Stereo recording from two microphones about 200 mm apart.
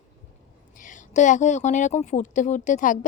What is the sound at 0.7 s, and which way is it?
Speech, 40° left (ahead or behind).